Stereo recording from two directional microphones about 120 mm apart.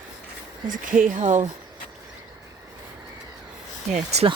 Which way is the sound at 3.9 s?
75° right (ahead or behind).